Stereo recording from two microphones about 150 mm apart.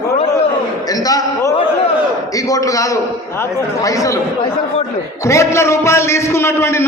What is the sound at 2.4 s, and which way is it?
A man's voice, 20° left (ahead or behind).